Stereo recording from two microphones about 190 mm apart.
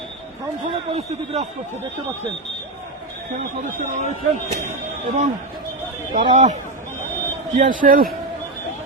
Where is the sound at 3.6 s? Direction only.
40° right (ahead or behind).